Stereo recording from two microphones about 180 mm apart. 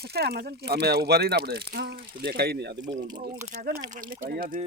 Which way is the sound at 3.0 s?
25° right (ahead or behind).